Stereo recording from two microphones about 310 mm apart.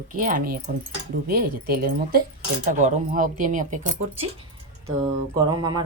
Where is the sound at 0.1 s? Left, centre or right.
Right.